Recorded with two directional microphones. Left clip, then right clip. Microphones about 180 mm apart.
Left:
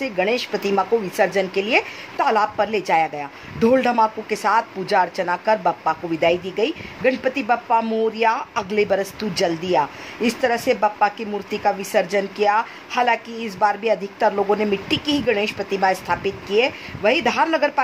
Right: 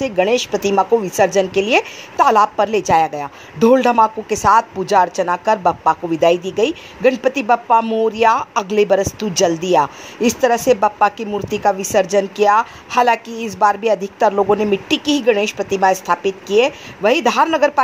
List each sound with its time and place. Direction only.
0.0 s a woman's voice: 25° right (ahead or behind)